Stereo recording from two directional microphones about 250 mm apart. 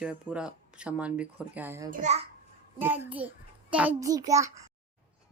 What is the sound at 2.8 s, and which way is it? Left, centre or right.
A child's voice, centre.